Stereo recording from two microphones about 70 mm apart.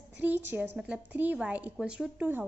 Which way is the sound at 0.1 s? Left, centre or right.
Right.